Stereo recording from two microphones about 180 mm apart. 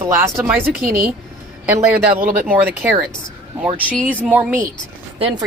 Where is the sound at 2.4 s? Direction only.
10° right (ahead or behind).